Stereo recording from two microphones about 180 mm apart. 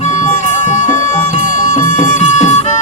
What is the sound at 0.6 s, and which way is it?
Music, 45° left (ahead or behind).